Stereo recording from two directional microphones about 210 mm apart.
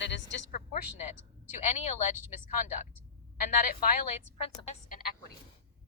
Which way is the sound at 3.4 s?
40° left (ahead or behind).